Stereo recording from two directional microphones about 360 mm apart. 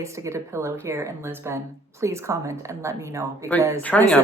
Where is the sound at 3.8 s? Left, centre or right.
Centre.